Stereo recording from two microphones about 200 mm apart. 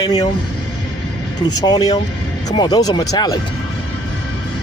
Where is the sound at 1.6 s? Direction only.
20° left (ahead or behind).